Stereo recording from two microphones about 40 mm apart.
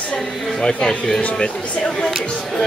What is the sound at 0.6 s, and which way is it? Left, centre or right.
Speech, left.